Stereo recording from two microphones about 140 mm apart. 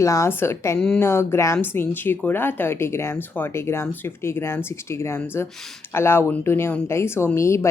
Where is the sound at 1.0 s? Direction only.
20° left (ahead or behind).